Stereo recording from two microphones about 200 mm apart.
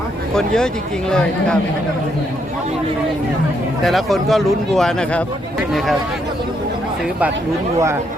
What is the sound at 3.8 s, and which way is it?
Speech, centre (ahead or behind).